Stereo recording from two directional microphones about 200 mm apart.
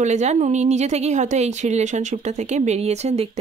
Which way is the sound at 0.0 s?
35° right (ahead or behind).